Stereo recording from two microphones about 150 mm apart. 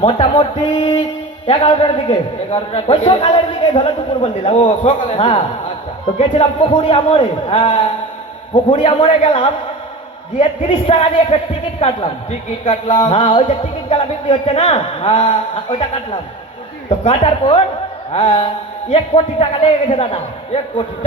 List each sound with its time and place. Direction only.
0.0 s a man's voice: 35° left (ahead or behind)
8.7 s a man's voice: 50° left (ahead or behind)
17.0 s a man's voice: 45° left (ahead or behind)